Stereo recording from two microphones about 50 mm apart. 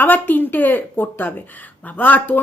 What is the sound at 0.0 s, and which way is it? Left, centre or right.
A woman's voice, left.